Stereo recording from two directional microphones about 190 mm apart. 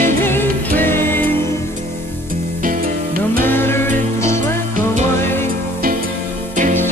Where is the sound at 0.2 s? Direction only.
10° left (ahead or behind).